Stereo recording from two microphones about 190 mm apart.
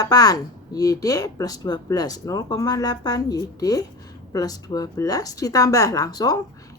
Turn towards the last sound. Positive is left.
turn(degrees=20)  # may be behind; listen again after turning